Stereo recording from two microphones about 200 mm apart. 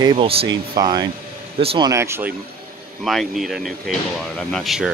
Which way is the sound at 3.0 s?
Centre (ahead or behind).